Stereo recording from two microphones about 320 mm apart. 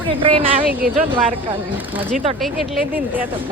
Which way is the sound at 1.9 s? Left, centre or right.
Centre.